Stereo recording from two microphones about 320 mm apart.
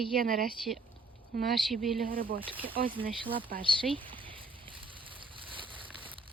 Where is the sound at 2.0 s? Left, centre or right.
Right.